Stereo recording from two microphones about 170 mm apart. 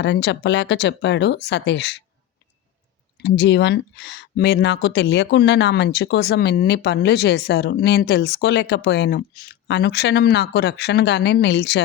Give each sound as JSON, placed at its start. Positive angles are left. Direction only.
{"t": 0.0, "sound": "speech", "side_deg": 90}
{"t": 3.2, "sound": "speech", "side_deg": 90}